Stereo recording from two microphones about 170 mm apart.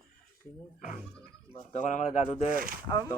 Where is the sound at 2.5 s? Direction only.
55° right (ahead or behind).